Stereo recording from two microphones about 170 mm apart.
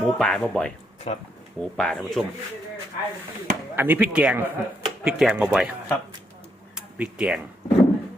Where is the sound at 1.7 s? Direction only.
5° left (ahead or behind).